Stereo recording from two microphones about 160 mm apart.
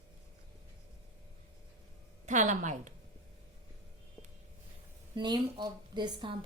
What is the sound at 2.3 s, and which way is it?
Speech, 50° right (ahead or behind).